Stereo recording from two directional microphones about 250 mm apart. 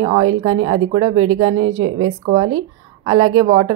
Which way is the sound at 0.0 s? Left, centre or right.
Centre.